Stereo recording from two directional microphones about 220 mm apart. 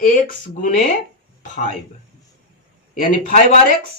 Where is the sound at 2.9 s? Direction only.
35° left (ahead or behind).